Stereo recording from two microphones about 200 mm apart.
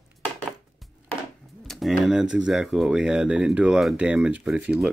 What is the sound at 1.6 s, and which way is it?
Speech, centre (ahead or behind).